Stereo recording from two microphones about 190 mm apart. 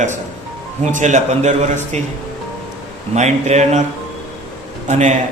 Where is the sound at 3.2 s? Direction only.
35° right (ahead or behind).